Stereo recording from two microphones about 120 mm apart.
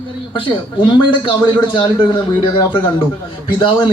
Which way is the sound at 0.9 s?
45° left (ahead or behind).